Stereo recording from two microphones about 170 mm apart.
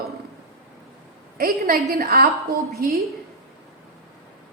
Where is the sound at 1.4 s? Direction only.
60° right (ahead or behind).